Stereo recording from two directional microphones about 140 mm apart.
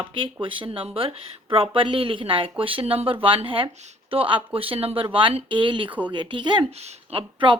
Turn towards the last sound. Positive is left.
turn(degrees=-40)  # may be behind; listen again after turning